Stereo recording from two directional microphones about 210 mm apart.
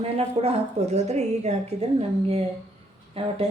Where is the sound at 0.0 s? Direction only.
30° right (ahead or behind).